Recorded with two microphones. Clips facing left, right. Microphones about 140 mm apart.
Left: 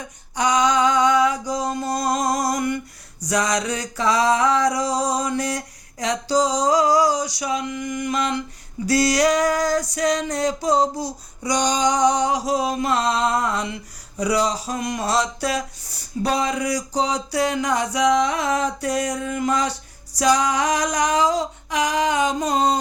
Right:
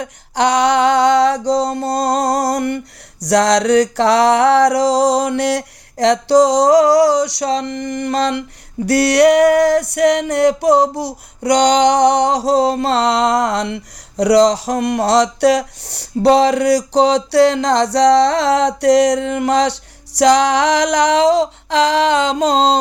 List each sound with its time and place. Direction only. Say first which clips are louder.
0.0 s music: right 7 dB; 75° right (ahead or behind)
3.2 s music: right 10 dB; 75° right (ahead or behind)